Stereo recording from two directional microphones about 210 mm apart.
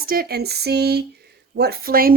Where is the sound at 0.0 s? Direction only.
45° right (ahead or behind).